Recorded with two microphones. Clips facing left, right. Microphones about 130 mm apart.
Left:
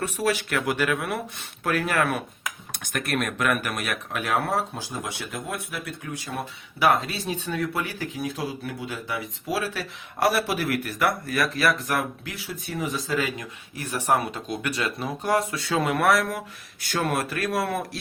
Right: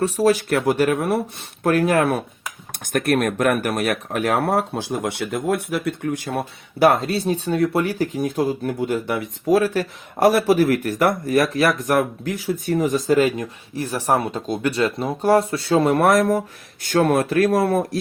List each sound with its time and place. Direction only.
0.0 s speech: 35° right (ahead or behind)
2.7 s speech: 50° right (ahead or behind)